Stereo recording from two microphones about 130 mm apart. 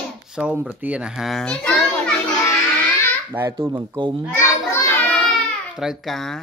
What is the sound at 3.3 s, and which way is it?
Speech, 20° right (ahead or behind).